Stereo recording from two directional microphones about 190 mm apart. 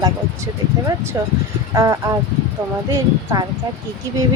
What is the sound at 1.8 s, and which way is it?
Speech, 15° right (ahead or behind).